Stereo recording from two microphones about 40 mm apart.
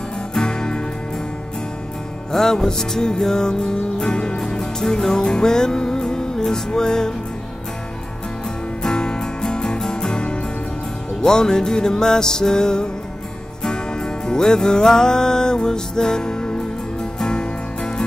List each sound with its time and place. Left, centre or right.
0.3 s music: centre
2.3 s music: centre
8.8 s music: left